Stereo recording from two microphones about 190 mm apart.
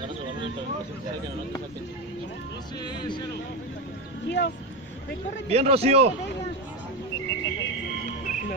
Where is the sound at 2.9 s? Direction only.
25° left (ahead or behind).